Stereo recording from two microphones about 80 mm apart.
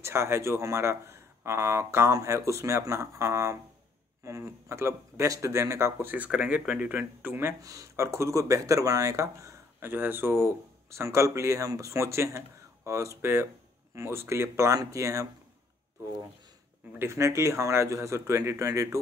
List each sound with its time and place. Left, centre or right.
0.0 s speech: right
7.6 s speech: right
9.8 s speech: right
17.0 s speech: right